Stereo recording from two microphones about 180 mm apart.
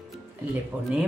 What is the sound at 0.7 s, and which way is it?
Speech, 10° right (ahead or behind).